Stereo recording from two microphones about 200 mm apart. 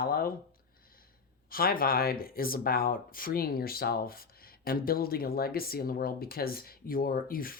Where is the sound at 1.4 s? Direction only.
50° left (ahead or behind).